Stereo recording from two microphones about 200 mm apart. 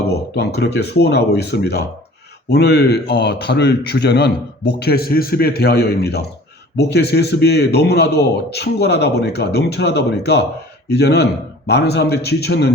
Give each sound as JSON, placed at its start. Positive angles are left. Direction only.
{"t": 0.0, "sound": "a man's voice", "side_deg": 55}